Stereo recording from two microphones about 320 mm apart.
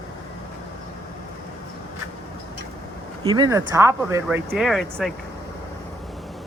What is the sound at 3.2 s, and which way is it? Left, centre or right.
Speech, centre.